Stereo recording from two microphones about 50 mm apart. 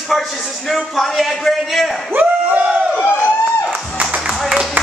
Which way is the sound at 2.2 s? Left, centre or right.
Right.